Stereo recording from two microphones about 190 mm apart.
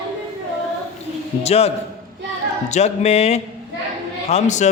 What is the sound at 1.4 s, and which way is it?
Speech, 35° left (ahead or behind).